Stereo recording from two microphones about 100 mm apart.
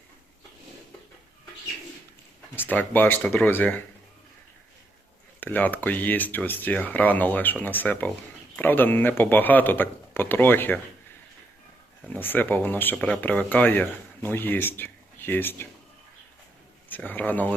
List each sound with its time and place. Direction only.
2.6 s speech: 20° left (ahead or behind)
5.4 s speech: 15° left (ahead or behind)
12.0 s speech: 15° left (ahead or behind)
16.9 s speech: 15° left (ahead or behind)